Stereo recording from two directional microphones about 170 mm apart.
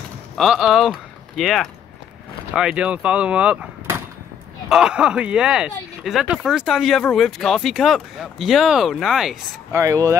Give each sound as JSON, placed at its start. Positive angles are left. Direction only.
{"t": 0.4, "sound": "speech", "side_deg": 0}
{"t": 9.7, "sound": "speech", "side_deg": -15}